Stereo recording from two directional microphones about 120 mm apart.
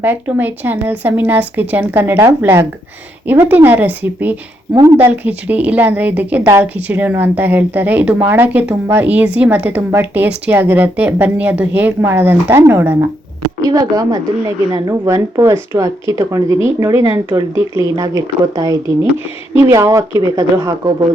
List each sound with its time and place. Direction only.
0.0 s a woman's voice: 15° right (ahead or behind); by 20.9 s 30° right (ahead or behind)